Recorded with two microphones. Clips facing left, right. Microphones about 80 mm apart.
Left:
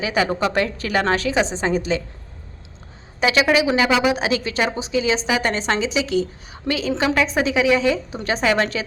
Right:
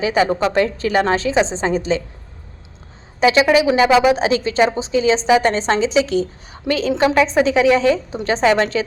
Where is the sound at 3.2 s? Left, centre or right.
Right.